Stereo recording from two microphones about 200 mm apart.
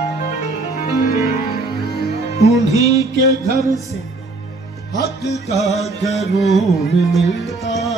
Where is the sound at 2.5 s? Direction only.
15° right (ahead or behind).